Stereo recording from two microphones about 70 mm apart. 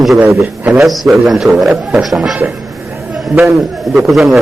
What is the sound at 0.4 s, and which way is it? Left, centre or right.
Speech, right.